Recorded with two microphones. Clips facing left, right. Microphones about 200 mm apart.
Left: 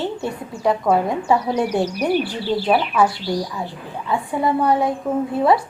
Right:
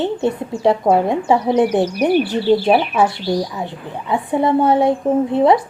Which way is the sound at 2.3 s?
25° right (ahead or behind).